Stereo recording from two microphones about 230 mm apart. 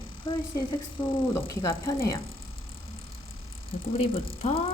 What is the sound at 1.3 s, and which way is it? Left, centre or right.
Speech, centre.